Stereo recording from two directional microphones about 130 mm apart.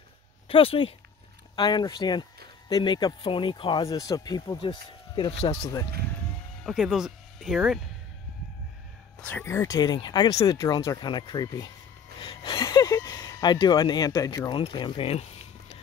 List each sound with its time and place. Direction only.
0.5 s speech: 45° left (ahead or behind)
1.6 s speech: 35° left (ahead or behind)
3.8 s speech: 30° left (ahead or behind)
4.6 s speech: 40° left (ahead or behind)
6.6 s speech: 5° right (ahead or behind)
9.2 s speech: 15° left (ahead or behind)
14.6 s speech: 40° left (ahead or behind)